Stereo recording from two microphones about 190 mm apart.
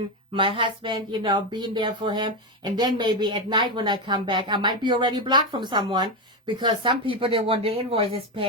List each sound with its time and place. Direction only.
0.3 s speech: 25° right (ahead or behind)